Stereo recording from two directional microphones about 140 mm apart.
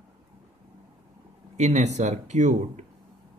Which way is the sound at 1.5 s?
55° right (ahead or behind).